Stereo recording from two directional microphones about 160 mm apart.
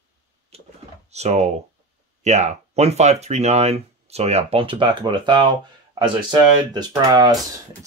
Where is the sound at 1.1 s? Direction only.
45° right (ahead or behind).